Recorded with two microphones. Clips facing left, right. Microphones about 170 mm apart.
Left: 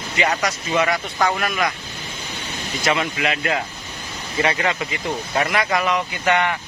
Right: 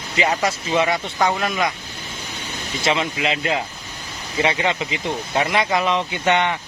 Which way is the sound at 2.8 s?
25° right (ahead or behind).